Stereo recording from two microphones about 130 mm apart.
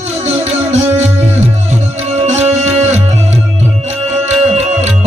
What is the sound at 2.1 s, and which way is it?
Music, 60° right (ahead or behind).